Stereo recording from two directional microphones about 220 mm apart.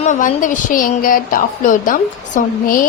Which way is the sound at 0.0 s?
35° left (ahead or behind).